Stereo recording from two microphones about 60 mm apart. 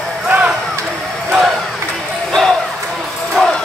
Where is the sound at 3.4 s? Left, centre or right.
Centre.